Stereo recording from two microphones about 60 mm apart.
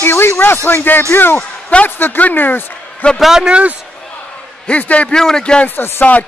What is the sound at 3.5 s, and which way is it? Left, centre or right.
Speech, right.